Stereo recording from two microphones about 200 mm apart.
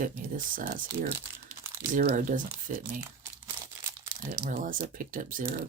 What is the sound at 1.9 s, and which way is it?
Speech, 40° right (ahead or behind).